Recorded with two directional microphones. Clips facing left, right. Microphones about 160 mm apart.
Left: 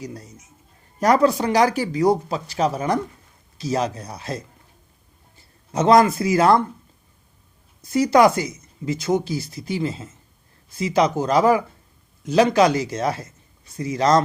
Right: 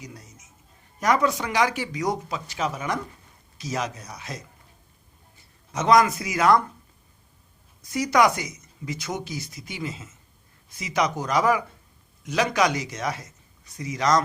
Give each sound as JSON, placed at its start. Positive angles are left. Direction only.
{"t": 0.0, "sound": "speech", "side_deg": 35}
{"t": 5.7, "sound": "speech", "side_deg": 30}
{"t": 7.8, "sound": "a man's voice", "side_deg": 30}